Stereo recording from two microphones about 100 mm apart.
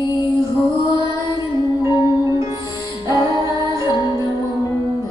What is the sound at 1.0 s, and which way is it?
Mantra, 30° right (ahead or behind).